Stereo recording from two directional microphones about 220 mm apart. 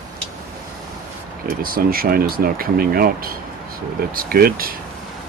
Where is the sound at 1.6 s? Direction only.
40° right (ahead or behind).